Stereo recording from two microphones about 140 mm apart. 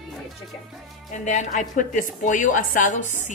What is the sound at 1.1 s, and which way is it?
A woman's voice, 60° left (ahead or behind).